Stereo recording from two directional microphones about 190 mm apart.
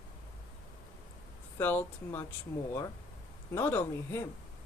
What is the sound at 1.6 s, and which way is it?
Speech, 10° left (ahead or behind).